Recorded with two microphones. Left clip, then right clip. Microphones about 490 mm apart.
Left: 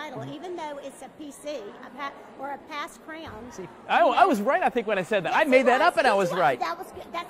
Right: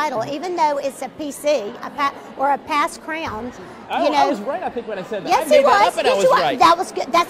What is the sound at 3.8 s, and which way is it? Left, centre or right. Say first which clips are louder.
Speech: right 2 dB; left.